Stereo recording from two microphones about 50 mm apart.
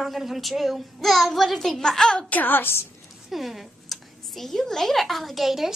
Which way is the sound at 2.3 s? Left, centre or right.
Left.